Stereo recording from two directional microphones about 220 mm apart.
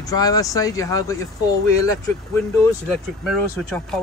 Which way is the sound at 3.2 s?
Centre (ahead or behind).